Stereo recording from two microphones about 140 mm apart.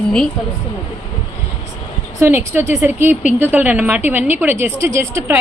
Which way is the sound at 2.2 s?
15° right (ahead or behind).